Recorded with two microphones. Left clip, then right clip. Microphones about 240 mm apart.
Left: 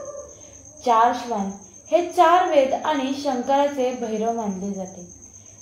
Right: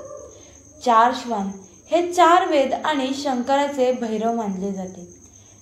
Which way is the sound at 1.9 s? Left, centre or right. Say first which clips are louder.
Right 1 dB; right.